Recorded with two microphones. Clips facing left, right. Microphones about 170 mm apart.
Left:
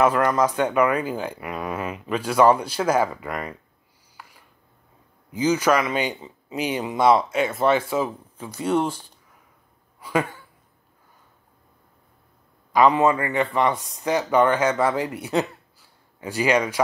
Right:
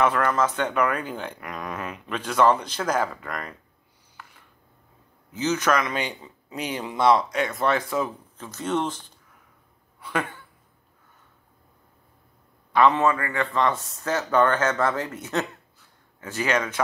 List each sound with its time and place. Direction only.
0.0 s speech: 10° left (ahead or behind)
5.3 s speech: 10° left (ahead or behind)
7.7 s speech: 30° left (ahead or behind)
8.0 s speech: 10° left (ahead or behind)
9.9 s a sound: 10° left (ahead or behind)
12.7 s speech: 10° left (ahead or behind)